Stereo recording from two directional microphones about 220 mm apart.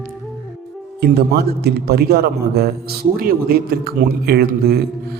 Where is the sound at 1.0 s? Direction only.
45° right (ahead or behind).